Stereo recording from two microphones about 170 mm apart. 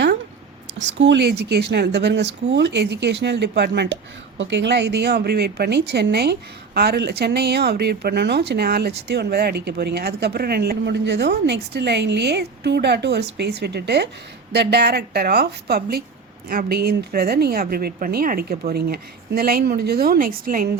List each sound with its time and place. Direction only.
0.9 s speech: 85° right; by 20.7 s 55° right (ahead or behind)